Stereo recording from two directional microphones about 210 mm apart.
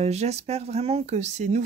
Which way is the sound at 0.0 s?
30° right (ahead or behind).